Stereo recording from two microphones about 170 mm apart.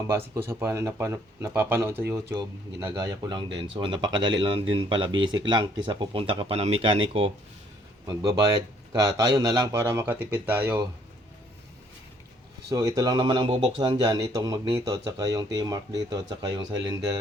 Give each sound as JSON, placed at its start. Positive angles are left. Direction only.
{"t": 0.3, "sound": "speech", "side_deg": -15}
{"t": 12.7, "sound": "speech", "side_deg": -20}